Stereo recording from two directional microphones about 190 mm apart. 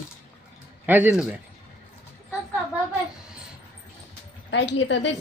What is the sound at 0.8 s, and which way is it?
Speech, 10° right (ahead or behind).